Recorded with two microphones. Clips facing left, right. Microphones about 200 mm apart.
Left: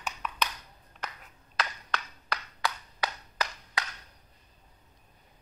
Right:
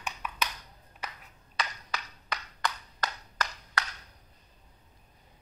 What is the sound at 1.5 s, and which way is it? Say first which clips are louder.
Ping: left 2 dB; centre (ahead or behind).